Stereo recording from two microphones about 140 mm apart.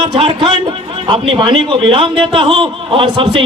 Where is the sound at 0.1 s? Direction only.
40° right (ahead or behind).